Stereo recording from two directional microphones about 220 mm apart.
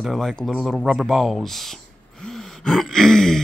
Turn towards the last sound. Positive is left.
turn(degrees=0)  # may be behind; listen again after turning